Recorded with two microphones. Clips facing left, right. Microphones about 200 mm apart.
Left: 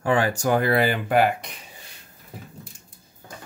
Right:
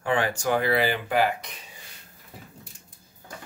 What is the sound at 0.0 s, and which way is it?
Speech, 40° left (ahead or behind).